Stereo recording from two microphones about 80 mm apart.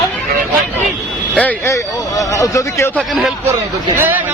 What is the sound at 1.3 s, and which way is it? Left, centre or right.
Speech, centre.